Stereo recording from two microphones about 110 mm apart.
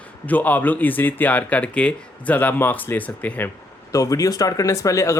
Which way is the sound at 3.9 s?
30° left (ahead or behind).